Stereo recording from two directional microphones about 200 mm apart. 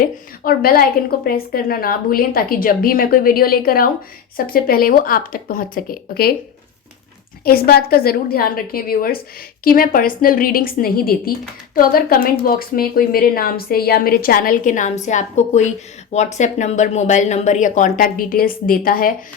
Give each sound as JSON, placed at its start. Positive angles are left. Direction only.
{"t": 0.0, "sound": "speech", "side_deg": 45}
{"t": 7.4, "sound": "speech", "side_deg": 50}